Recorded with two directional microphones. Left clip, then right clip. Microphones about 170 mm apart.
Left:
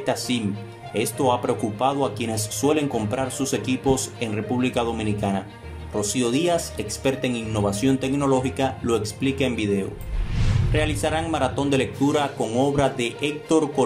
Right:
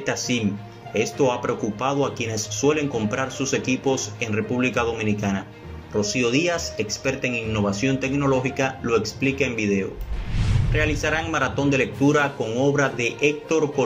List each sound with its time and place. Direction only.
0.3 s speech: 30° left (ahead or behind)